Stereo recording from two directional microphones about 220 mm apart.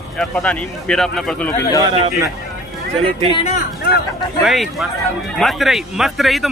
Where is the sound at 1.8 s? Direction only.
15° right (ahead or behind).